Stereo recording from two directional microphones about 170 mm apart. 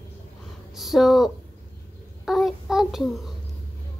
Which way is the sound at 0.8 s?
Centre (ahead or behind).